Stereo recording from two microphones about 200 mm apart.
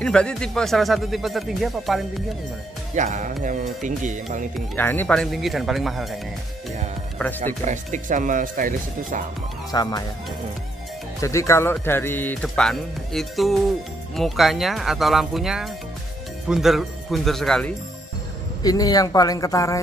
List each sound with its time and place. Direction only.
0.0 s speech: 5° left (ahead or behind)
2.9 s speech: 35° right (ahead or behind)
4.7 s speech: 10° left (ahead or behind)
7.2 s speech: 10° left (ahead or behind)
7.6 s speech: 40° right (ahead or behind)
9.7 s speech: 20° left (ahead or behind)
11.1 s speech: 15° left (ahead or behind)
18.6 s speech: 20° left (ahead or behind)